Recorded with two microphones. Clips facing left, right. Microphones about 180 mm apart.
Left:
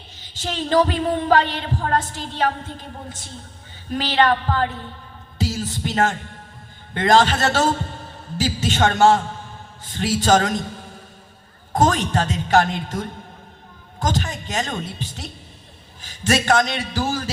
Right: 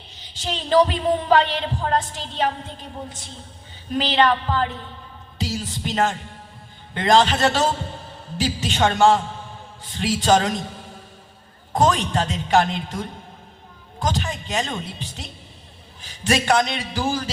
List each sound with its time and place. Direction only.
0.4 s heart sounds: 45° left (ahead or behind)
4.2 s heart sounds: 45° left (ahead or behind)
5.4 s music: 45° left (ahead or behind)
6.9 s heart sounds: 45° left (ahead or behind)
11.8 s heart sounds: 45° left (ahead or behind)
14.0 s a woman's voice: 45° left (ahead or behind)
16.0 s heart sounds: 45° left (ahead or behind)